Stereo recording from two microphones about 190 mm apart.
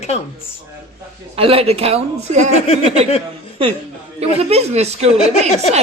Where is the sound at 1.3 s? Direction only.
30° right (ahead or behind).